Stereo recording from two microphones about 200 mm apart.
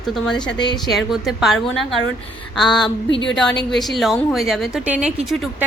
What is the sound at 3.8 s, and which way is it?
A woman's voice, centre (ahead or behind).